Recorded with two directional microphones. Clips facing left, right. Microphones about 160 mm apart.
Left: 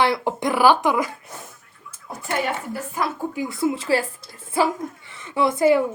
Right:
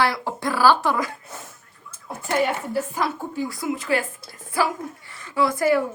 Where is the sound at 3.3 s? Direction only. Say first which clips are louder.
Left 3 dB; 20° left (ahead or behind).